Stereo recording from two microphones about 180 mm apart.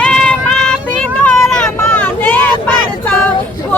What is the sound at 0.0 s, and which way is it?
Child singing, 5° left (ahead or behind).